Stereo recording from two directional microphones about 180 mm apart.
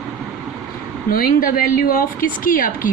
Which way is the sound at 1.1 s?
50° left (ahead or behind).